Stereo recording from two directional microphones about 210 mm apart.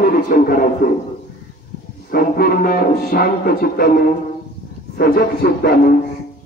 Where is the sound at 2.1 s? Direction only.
45° left (ahead or behind).